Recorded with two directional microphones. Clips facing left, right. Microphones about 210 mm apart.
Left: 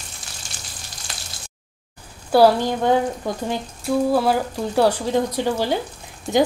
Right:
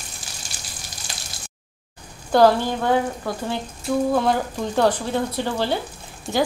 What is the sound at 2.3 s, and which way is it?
Speech, 10° left (ahead or behind).